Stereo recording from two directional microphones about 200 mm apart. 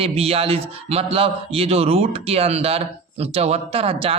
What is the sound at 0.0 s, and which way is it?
A man's voice, 30° right (ahead or behind).